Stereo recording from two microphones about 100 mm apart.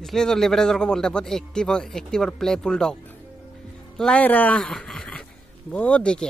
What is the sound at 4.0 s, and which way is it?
Speech, 10° left (ahead or behind).